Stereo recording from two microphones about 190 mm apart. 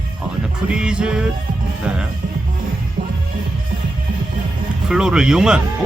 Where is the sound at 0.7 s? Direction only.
5° right (ahead or behind).